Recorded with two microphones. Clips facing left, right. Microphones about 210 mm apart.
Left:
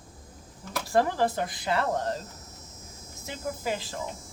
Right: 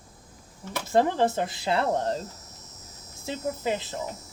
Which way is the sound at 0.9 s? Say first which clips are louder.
Right 2 dB; 20° right (ahead or behind).